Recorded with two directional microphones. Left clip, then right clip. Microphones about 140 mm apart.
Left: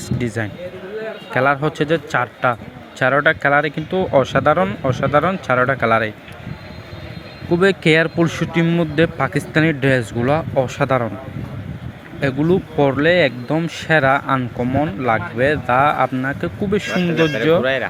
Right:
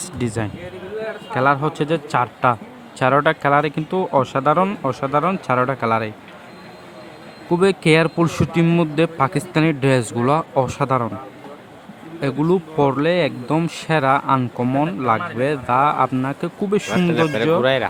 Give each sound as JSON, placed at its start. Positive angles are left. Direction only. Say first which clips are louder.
{"t": 0.2, "sound": "speech", "louder": "even", "side_deg": -30}
{"t": 1.3, "sound": "a man's voice", "louder": "left 1 dB", "side_deg": 0}
{"t": 1.6, "sound": "speech", "louder": "left 2 dB", "side_deg": -15}
{"t": 7.5, "sound": "speech", "louder": "left 1 dB", "side_deg": -15}
{"t": 8.6, "sound": "speech", "louder": "right 2 dB", "side_deg": -30}
{"t": 9.0, "sound": "speech", "louder": "left 1 dB", "side_deg": -15}
{"t": 10.8, "sound": "speech", "louder": "left 2 dB", "side_deg": -10}
{"t": 12.2, "sound": "speech", "louder": "left 2 dB", "side_deg": -20}
{"t": 14.6, "sound": "speech", "louder": "even", "side_deg": -30}
{"t": 15.0, "sound": "speech", "louder": "left 4 dB", "side_deg": -10}